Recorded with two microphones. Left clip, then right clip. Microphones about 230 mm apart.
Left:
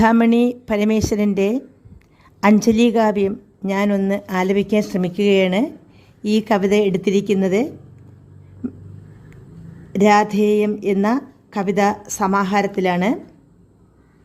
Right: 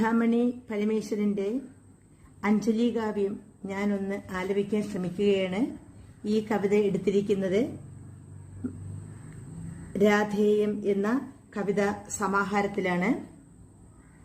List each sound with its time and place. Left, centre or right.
0.0 s a woman's voice: left
9.9 s a woman's voice: left